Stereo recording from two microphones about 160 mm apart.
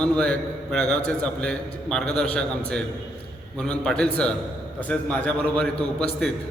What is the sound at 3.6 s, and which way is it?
A man's voice, 5° left (ahead or behind).